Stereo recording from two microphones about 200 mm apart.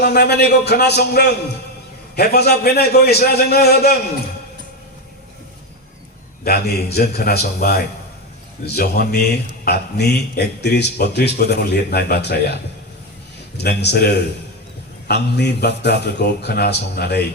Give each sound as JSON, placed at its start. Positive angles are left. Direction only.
{"t": 0.0, "sound": "a man's voice", "side_deg": 55}
{"t": 6.4, "sound": "a man's voice", "side_deg": 50}
{"t": 13.6, "sound": "speech", "side_deg": 55}